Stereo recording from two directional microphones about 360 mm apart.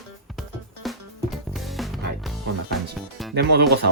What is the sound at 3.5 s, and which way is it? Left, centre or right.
Speech, right.